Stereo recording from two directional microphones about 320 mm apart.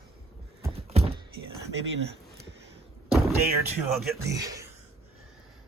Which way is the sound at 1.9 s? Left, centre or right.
Right.